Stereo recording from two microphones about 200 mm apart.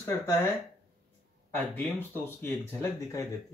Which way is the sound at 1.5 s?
10° left (ahead or behind).